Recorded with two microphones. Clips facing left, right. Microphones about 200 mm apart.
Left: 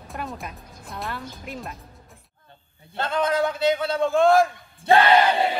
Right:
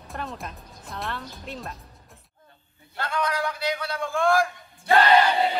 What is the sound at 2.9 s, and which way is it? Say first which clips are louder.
A man's voice: left 5 dB; 25° left (ahead or behind).